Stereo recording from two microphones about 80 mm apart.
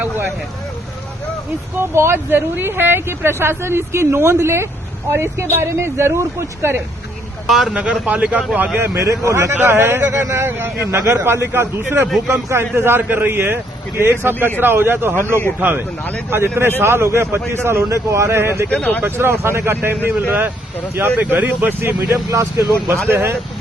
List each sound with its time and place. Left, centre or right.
1.7 s speech: right
7.4 s a man's voice: centre
7.7 s a man's voice: centre
8.9 s speech: right
9.5 s a man's voice: right
18.7 s speech: centre
19.0 s a man's voice: right